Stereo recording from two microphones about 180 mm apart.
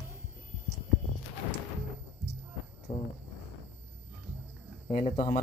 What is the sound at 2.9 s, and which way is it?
Speech, 40° left (ahead or behind).